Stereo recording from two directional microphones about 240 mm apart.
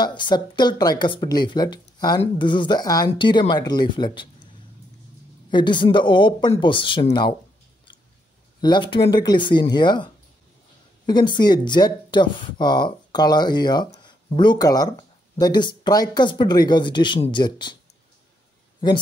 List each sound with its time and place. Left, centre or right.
0.0 s speech: centre
5.5 s speech: centre
8.5 s speech: centre
11.1 s speech: centre